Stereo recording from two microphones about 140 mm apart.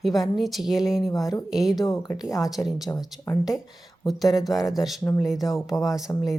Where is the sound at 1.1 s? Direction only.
25° left (ahead or behind).